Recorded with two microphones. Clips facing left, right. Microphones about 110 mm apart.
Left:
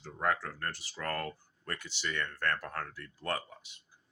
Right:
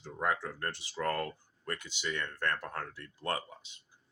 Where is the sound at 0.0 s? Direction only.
15° right (ahead or behind).